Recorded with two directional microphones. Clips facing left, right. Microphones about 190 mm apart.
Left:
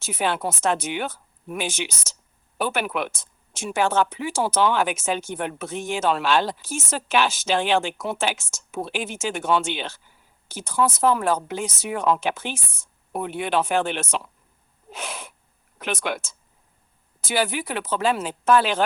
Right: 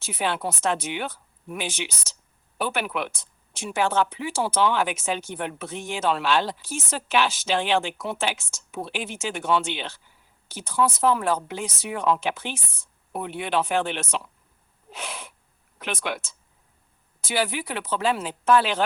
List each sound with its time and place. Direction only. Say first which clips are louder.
0.0 s speech: left 2 dB; 45° left (ahead or behind)